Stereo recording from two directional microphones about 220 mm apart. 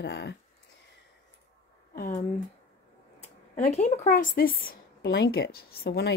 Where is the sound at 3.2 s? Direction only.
30° left (ahead or behind).